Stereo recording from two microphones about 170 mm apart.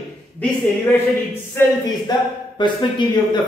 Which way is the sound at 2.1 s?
25° left (ahead or behind).